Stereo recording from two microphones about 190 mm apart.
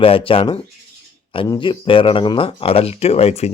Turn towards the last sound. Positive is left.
turn(degrees=35)  # may be behind; listen again after turning